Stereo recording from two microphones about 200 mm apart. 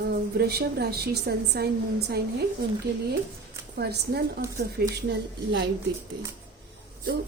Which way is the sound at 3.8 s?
55° right (ahead or behind).